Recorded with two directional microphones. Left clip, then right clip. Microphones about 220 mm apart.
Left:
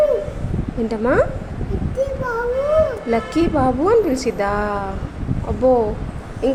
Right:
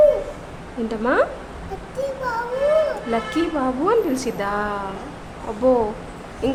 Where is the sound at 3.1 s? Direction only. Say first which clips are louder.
Left 4 dB; 10° left (ahead or behind).